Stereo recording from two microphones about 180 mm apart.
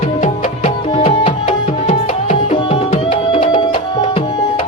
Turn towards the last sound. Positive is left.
turn(degrees=30)  # may be behind; listen again after turning